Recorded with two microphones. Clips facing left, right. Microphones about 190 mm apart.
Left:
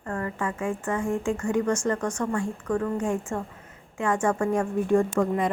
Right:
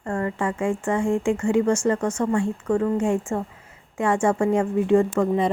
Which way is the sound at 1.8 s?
20° right (ahead or behind).